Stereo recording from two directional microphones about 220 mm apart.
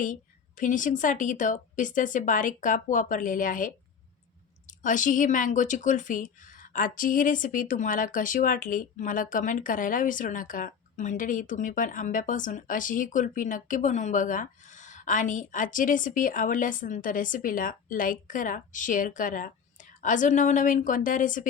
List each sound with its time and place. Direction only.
0.0 s speech: 35° left (ahead or behind)
4.8 s speech: 35° left (ahead or behind)